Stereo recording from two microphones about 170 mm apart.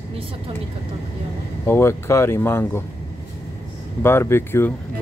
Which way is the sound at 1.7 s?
15° left (ahead or behind).